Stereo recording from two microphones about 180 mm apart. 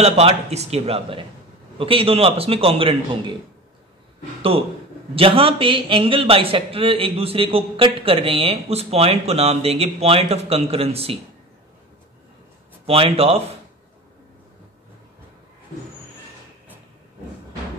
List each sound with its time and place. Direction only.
0.0 s a man's voice: 35° right (ahead or behind)
5.1 s a man's voice: 30° right (ahead or behind)
12.8 s a man's voice: 30° right (ahead or behind)